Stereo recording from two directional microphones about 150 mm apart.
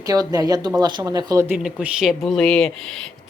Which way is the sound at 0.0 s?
25° right (ahead or behind).